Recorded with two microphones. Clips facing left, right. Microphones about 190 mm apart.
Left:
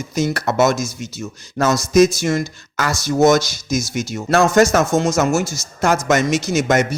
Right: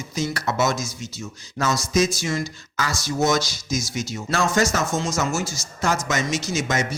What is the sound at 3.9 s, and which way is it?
A man's voice, 65° left (ahead or behind).